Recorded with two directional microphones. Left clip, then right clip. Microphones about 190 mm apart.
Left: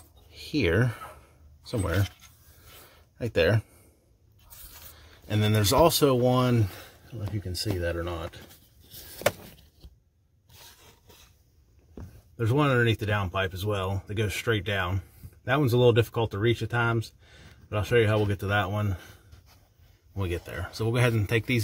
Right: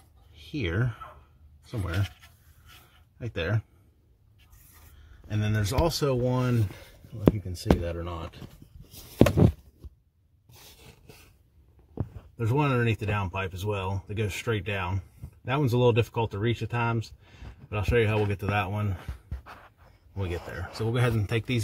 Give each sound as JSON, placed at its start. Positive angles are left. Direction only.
{"t": 0.3, "sound": "speech", "side_deg": 30}
{"t": 3.2, "sound": "speech", "side_deg": 30}
{"t": 5.3, "sound": "speech", "side_deg": 40}
{"t": 12.4, "sound": "speech", "side_deg": 10}
{"t": 20.2, "sound": "speech", "side_deg": 25}